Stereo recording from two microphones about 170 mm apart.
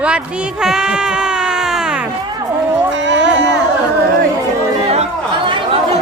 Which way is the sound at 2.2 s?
25° right (ahead or behind).